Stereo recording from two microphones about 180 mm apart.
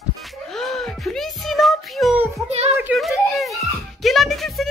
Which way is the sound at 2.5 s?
35° right (ahead or behind).